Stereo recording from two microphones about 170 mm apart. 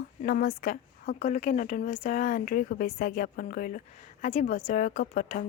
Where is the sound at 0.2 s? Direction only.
50° left (ahead or behind).